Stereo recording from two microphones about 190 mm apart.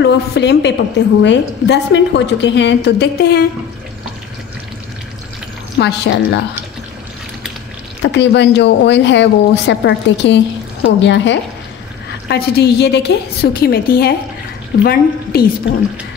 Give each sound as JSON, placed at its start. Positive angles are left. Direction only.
{"t": 0.0, "sound": "a woman's voice", "side_deg": 65}
{"t": 5.8, "sound": "a woman's voice", "side_deg": 65}
{"t": 8.0, "sound": "a woman's voice", "side_deg": 65}